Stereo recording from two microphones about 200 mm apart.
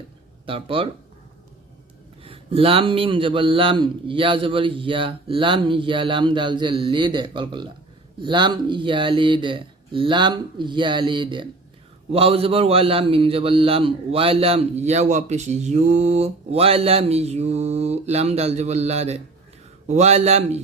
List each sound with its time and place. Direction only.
0.4 s a man's voice: 25° right (ahead or behind)
2.2 s a man's voice: 30° right (ahead or behind)